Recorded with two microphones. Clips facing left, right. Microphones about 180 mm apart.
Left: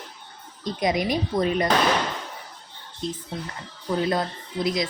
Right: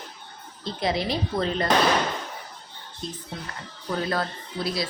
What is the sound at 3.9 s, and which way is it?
Speech, 20° left (ahead or behind).